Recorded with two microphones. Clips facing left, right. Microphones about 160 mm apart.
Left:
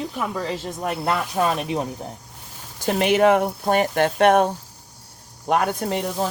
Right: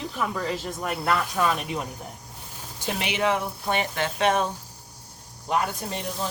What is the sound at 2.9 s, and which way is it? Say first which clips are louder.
Speech: left 9 dB; 45° left (ahead or behind).